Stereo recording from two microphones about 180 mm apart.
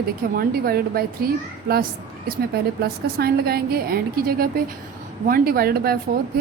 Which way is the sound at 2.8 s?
60° right (ahead or behind).